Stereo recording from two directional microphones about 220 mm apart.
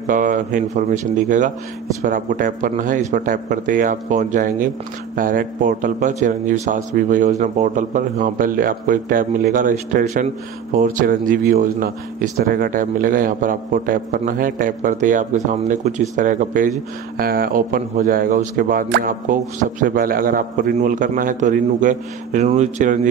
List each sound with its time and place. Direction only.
0.0 s speech: 35° right (ahead or behind)